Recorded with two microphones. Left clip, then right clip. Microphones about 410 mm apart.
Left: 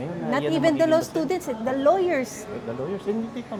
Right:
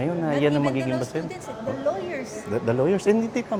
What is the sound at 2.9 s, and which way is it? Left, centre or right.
Speech, right.